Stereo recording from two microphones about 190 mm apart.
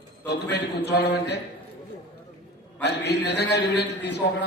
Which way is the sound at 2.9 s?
60° left (ahead or behind).